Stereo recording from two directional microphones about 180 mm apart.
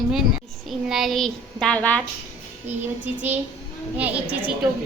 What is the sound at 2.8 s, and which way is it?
Speech, 10° right (ahead or behind).